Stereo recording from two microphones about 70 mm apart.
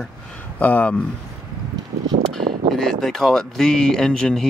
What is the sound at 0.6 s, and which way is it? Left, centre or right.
Speech, left.